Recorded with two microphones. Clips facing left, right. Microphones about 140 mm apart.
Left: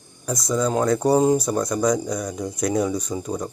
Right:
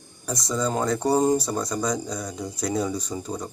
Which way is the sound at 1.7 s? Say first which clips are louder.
Left 5 dB; 15° left (ahead or behind).